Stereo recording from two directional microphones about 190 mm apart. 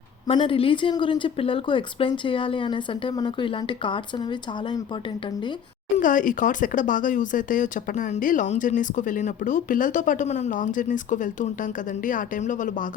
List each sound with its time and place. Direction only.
0.3 s a woman's voice: 30° left (ahead or behind)
6.0 s speech: 45° left (ahead or behind)